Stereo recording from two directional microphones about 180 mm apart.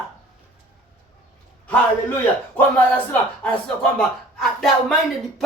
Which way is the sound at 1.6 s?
10° left (ahead or behind).